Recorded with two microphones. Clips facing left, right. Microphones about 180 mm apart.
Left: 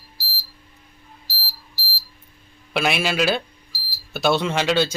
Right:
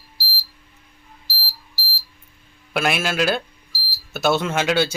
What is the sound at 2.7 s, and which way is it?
Speech, centre (ahead or behind).